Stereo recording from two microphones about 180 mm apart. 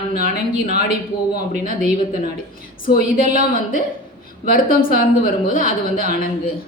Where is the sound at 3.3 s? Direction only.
50° left (ahead or behind).